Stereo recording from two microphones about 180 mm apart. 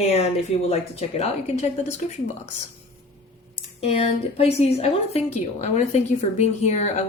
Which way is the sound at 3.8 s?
35° left (ahead or behind).